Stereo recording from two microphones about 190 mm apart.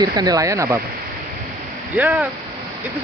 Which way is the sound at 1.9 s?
10° right (ahead or behind).